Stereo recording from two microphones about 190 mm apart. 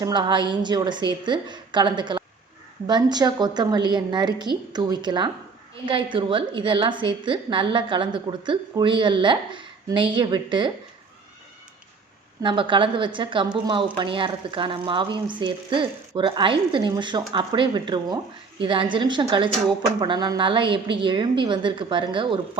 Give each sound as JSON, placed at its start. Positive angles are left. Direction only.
{"t": 0.0, "sound": "a woman's voice", "side_deg": -25}
{"t": 12.4, "sound": "a woman's voice", "side_deg": -25}